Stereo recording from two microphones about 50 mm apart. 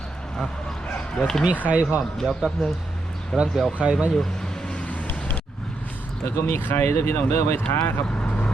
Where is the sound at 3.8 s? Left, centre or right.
Centre.